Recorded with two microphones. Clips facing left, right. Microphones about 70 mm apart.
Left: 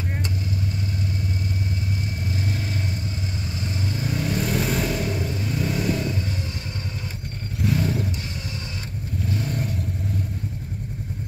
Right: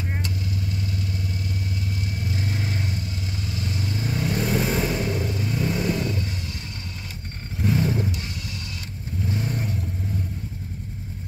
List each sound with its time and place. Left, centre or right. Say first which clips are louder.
3.6 s vehicle: left 1 dB; left
3.9 s vehicle: even; centre
7.6 s a sound: right 1 dB; centre
9.3 s vehicle: even; centre